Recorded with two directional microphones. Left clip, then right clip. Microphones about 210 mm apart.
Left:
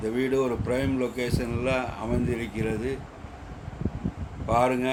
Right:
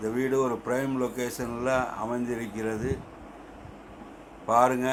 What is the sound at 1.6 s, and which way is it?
Speech, 5° right (ahead or behind).